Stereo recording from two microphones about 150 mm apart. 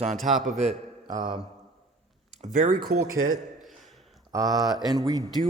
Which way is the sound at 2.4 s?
65° right (ahead or behind).